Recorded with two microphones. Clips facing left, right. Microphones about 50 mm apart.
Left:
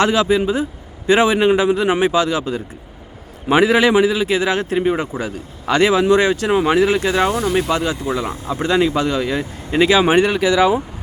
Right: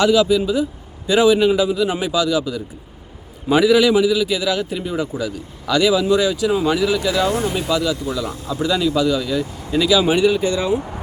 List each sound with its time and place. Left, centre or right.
0.0 s a man's voice: left
6.7 s a man's voice: left